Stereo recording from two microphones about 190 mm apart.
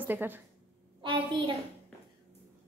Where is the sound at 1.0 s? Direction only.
25° right (ahead or behind).